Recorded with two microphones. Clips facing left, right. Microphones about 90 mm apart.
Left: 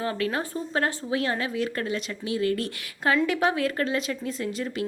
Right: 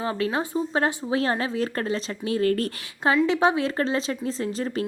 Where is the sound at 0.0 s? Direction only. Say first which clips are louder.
Right 2 dB; 20° right (ahead or behind); by 2.6 s 40° right (ahead or behind).